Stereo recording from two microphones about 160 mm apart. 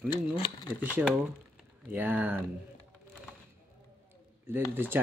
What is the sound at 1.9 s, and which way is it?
Speech, 10° right (ahead or behind).